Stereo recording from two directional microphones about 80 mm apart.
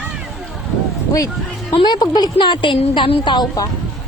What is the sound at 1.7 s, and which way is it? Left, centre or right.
A woman's voice, left.